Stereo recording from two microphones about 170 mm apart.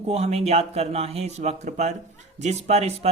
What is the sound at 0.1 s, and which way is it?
Speech, 35° right (ahead or behind).